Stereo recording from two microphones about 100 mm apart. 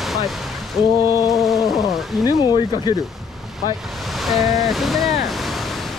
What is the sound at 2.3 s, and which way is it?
Speech, 45° left (ahead or behind).